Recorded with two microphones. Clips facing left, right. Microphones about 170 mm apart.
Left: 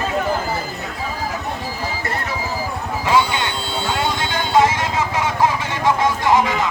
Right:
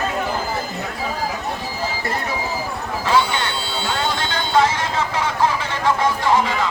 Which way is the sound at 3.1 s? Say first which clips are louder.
Left 1 dB; 15° left (ahead or behind).